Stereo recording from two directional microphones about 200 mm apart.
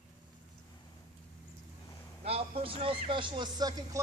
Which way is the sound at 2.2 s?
30° right (ahead or behind).